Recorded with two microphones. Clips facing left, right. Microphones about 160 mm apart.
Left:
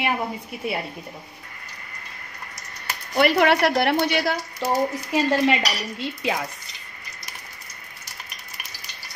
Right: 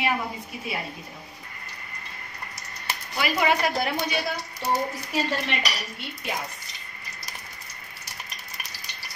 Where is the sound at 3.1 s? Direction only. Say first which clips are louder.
Left 6 dB; 60° left (ahead or behind).